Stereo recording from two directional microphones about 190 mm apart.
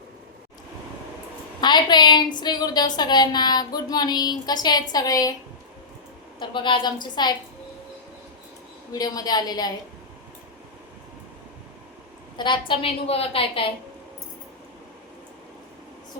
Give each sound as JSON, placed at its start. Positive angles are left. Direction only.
{"t": 1.6, "sound": "a woman's voice", "side_deg": 25}
{"t": 6.4, "sound": "a woman's voice", "side_deg": 25}
{"t": 8.9, "sound": "a woman's voice", "side_deg": 20}
{"t": 12.4, "sound": "a woman's voice", "side_deg": 25}